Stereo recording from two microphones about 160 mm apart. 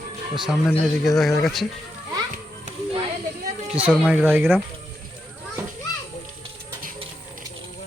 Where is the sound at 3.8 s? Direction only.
10° right (ahead or behind).